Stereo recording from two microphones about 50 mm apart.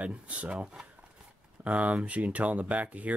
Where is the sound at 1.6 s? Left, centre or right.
Right.